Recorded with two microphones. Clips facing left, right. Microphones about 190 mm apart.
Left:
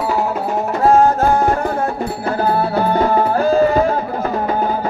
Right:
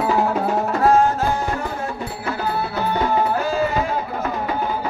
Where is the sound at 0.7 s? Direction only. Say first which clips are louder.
Left 5 dB; 35° left (ahead or behind); by 2.0 s 55° left (ahead or behind).